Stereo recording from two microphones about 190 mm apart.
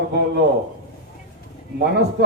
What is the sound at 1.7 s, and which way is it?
Speech, 60° right (ahead or behind).